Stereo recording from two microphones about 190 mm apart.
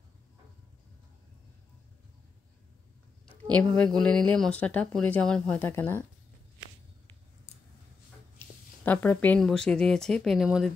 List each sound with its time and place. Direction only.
3.5 s speech: 5° left (ahead or behind)
8.8 s speech: 10° left (ahead or behind)